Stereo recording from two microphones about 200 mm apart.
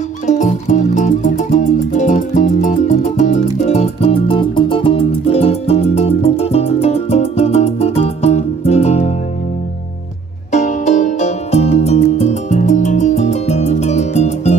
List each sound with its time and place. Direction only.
0.3 s music: 40° left (ahead or behind)
10.5 s music: 35° left (ahead or behind)